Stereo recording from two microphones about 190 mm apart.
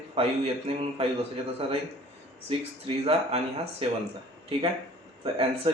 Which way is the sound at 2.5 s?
30° right (ahead or behind).